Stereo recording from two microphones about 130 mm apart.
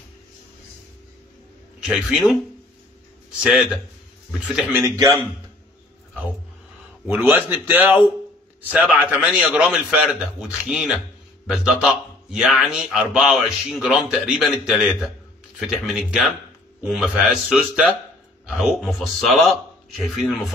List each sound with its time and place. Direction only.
1.8 s speech: 5° right (ahead or behind)
3.4 s speech: 5° right (ahead or behind)
4.7 s a man's voice: 25° right (ahead or behind)
7.1 s a man's voice: 15° right (ahead or behind); by 20.5 s centre (ahead or behind)